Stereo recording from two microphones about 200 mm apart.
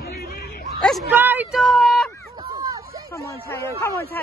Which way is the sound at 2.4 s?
20° right (ahead or behind).